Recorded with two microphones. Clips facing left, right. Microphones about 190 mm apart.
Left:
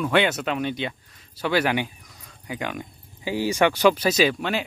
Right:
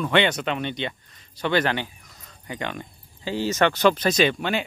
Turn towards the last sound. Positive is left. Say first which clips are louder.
# even
turn(degrees=0)  # may be behind; listen again after turning